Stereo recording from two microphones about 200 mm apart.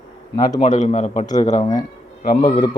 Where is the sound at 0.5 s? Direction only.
40° left (ahead or behind).